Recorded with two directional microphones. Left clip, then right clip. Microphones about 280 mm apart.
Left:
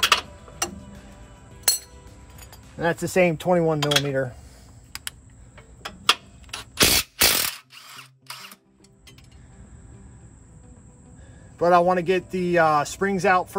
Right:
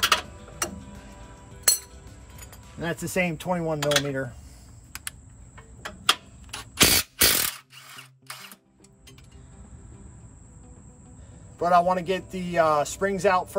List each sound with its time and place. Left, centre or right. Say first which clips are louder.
0.0 s tick-tock: left 3 dB; centre
1.6 s chink: even; centre
3.0 s a man's voice: left 6 dB; left
3.8 s mechanisms: left 2 dB; centre
4.1 s a man's voice: left 5 dB; left
5.6 s a sound: left 1 dB; centre
11.5 s a man's voice: left 3 dB; left